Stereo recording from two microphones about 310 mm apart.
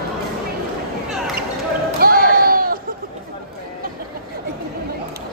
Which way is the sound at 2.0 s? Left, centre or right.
Right.